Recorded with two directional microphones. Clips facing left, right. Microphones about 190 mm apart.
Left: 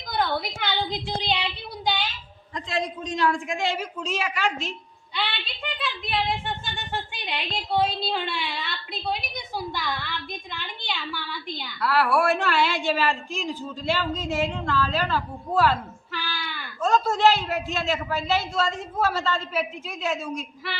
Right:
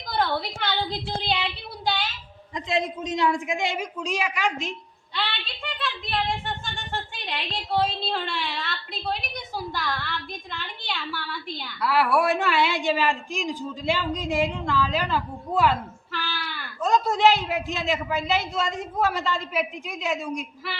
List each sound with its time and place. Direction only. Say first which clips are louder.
0.2 s a woman's voice: even; centre (ahead or behind)
2.6 s a man's voice: right 2 dB; 20° right (ahead or behind)
5.1 s a woman's voice: even; centre (ahead or behind)
12.2 s a man's voice: even; 15° right (ahead or behind)
16.1 s speech: right 1 dB; centre (ahead or behind)
16.8 s a man's voice: even; 15° right (ahead or behind)